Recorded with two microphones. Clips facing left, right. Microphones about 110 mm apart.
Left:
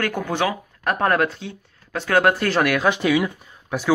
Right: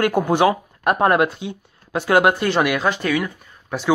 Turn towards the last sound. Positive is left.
turn(degrees=5)  # may be behind; listen again after turning